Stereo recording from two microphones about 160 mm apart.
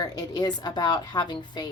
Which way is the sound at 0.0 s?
25° left (ahead or behind).